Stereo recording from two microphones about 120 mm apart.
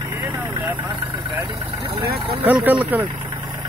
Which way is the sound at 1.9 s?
45° right (ahead or behind).